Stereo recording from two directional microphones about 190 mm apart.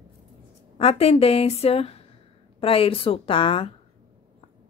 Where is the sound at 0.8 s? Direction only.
30° left (ahead or behind).